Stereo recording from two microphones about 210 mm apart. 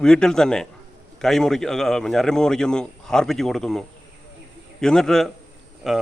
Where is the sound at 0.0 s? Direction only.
5° left (ahead or behind).